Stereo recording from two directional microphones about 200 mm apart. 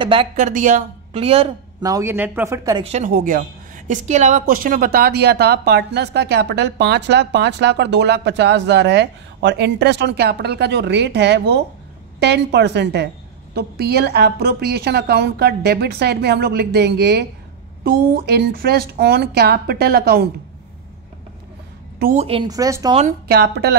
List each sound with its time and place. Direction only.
0.0 s speech: 25° right (ahead or behind)
0.4 s speech: 40° right (ahead or behind)
1.8 s speech: 15° right (ahead or behind)
2.8 s speech: 35° right (ahead or behind)
3.1 s a woman's voice: 45° right (ahead or behind)
22.0 s speech: 35° right (ahead or behind); by 22.9 s 15° right (ahead or behind)
23.2 s a woman's voice: 55° right (ahead or behind)